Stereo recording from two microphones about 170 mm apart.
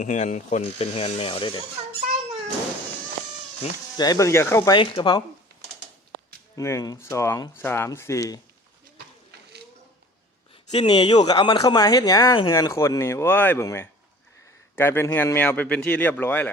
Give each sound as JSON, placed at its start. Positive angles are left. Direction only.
{"t": 0.0, "sound": "speech", "side_deg": 45}
{"t": 3.9, "sound": "speech", "side_deg": 25}
{"t": 4.8, "sound": "speech", "side_deg": 30}
{"t": 6.6, "sound": "speech", "side_deg": 20}
{"t": 10.7, "sound": "speech", "side_deg": 30}